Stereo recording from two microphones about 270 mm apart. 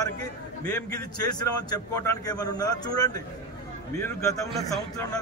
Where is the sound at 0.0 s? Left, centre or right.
Centre.